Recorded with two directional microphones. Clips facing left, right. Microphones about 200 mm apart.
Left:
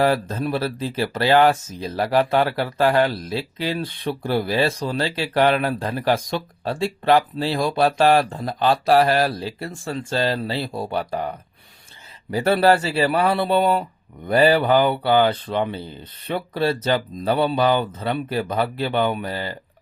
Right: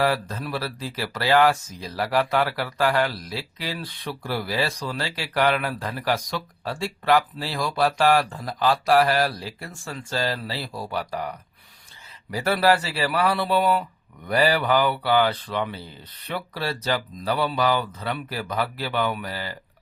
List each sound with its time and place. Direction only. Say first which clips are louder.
0.0 s speech: left 4 dB; 25° left (ahead or behind)